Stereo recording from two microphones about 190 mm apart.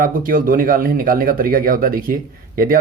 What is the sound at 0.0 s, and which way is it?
Speech, 45° right (ahead or behind).